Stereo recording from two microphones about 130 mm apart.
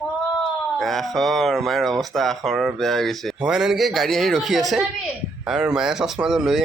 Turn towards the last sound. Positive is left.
turn(degrees=-5)  # may be behind; listen again after turning